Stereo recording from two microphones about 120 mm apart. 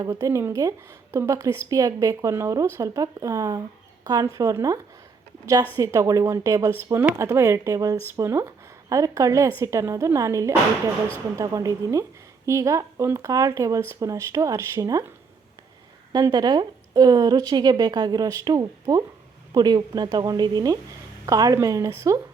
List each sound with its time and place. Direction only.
0.0 s speech: 30° right (ahead or behind)
16.1 s a woman's voice: 35° right (ahead or behind)